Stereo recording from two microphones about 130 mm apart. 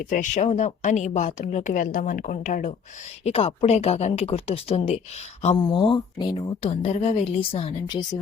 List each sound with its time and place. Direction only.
0.0 s a woman's voice: 75° left (ahead or behind)
3.2 s speech: 50° left (ahead or behind)
5.7 s speech: 40° left (ahead or behind)